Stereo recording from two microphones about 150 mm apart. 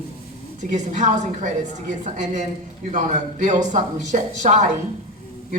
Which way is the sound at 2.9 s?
55° right (ahead or behind).